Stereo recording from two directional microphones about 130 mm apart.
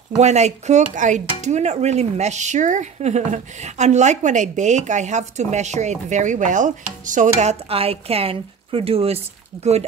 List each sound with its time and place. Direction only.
0.2 s speech: 60° right (ahead or behind)